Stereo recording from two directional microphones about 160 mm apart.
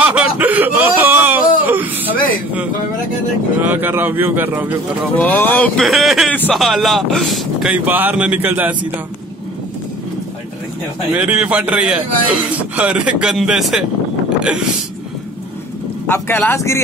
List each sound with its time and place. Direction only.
0.0 s a sound: 10° right (ahead or behind)
3.6 s speech: 10° right (ahead or behind)
5.1 s speech: 10° left (ahead or behind)
5.9 s a man's voice: centre (ahead or behind)
11.1 s speech: 10° right (ahead or behind)
16.1 s speech: 15° left (ahead or behind)